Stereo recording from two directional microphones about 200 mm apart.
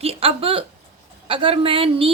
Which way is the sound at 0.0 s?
30° right (ahead or behind).